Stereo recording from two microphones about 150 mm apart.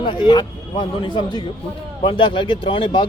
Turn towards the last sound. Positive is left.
turn(degrees=35)  # may be behind; listen again after turning